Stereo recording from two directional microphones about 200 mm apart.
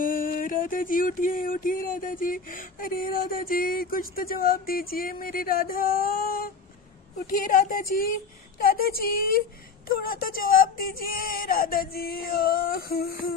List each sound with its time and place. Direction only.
0.0 s music: 45° left (ahead or behind)